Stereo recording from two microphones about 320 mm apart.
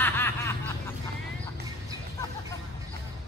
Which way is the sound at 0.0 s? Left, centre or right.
Centre.